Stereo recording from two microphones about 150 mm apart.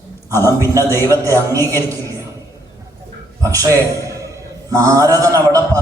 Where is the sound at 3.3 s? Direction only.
20° right (ahead or behind).